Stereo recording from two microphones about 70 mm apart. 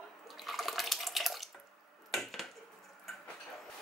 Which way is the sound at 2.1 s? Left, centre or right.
Centre.